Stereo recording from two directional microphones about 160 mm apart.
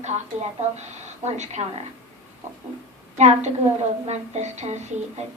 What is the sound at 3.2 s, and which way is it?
A woman's voice, 45° right (ahead or behind).